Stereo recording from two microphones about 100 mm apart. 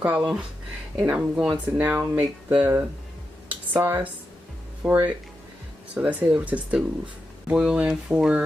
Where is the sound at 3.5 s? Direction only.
20° right (ahead or behind).